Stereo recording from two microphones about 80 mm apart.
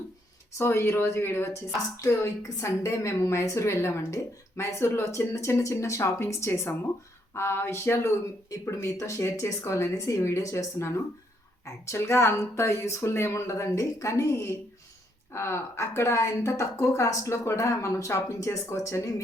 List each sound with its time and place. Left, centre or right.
0.6 s a woman's voice: left